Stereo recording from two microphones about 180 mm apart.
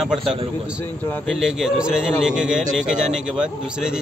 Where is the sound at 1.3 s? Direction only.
Centre (ahead or behind).